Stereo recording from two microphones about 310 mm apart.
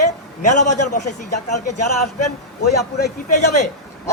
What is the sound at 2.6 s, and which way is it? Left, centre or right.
A man's voice, left.